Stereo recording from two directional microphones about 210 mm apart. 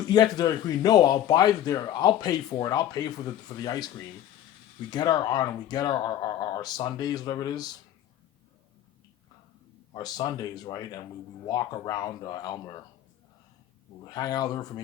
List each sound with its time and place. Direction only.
0.1 s speech: 20° left (ahead or behind)
9.9 s speech: 20° left (ahead or behind)
14.0 s speech: 20° left (ahead or behind)